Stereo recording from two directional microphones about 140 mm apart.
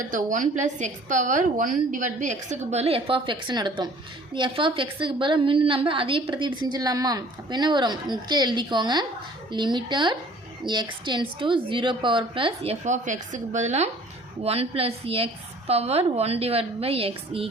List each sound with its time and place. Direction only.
0.1 s a woman's voice: 70° right (ahead or behind); by 12.7 s 40° right (ahead or behind)
12.8 s a woman's voice: 60° right (ahead or behind); by 17.5 s 40° right (ahead or behind)